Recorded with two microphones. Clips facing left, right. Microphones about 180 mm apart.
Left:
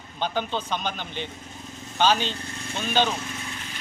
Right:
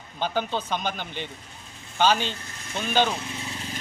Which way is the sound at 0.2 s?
10° right (ahead or behind).